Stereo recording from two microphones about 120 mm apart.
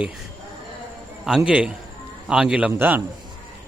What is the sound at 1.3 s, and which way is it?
A man's voice, 5° right (ahead or behind).